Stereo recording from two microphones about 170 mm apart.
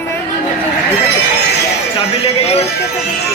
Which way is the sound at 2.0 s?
35° left (ahead or behind).